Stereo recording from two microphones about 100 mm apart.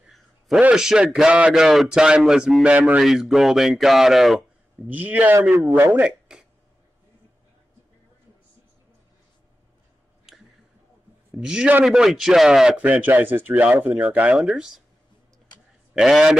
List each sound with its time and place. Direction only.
0.0 s a sound: 5° right (ahead or behind)
0.6 s a man's voice: 10° right (ahead or behind)
4.8 s a man's voice: 15° right (ahead or behind)
10.3 s a sound: 5° right (ahead or behind)
11.3 s a man's voice: 10° right (ahead or behind)
15.9 s a man's voice: 5° right (ahead or behind)